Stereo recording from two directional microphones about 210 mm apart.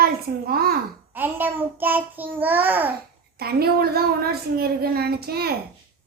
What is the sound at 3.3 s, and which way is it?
A woman's voice, 50° right (ahead or behind).